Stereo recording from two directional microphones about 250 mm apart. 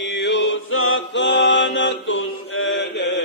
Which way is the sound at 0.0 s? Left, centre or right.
Left.